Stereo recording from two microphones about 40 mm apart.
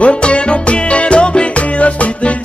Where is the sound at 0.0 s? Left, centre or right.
Left.